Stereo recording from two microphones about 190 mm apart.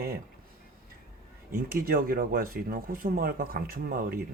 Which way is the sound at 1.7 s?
50° right (ahead or behind).